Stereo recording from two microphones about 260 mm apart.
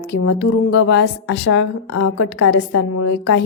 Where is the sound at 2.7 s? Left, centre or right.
Left.